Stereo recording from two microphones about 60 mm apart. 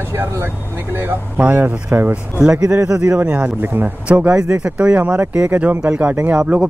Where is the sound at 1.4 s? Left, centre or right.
Right.